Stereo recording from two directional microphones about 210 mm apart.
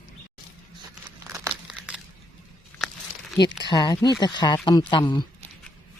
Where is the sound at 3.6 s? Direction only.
20° left (ahead or behind).